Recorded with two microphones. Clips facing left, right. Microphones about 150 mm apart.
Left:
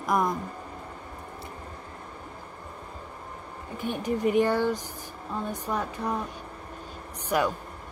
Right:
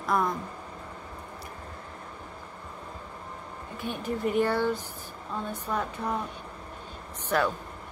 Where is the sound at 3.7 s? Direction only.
15° left (ahead or behind).